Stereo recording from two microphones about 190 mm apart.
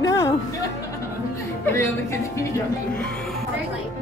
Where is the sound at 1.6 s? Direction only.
15° left (ahead or behind).